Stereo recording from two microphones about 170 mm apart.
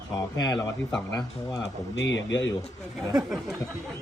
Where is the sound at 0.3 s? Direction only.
25° left (ahead or behind).